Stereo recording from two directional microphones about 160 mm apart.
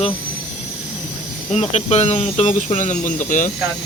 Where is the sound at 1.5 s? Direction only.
45° left (ahead or behind).